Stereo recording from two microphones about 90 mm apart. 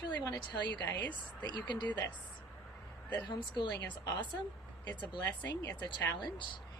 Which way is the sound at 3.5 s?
55° left (ahead or behind).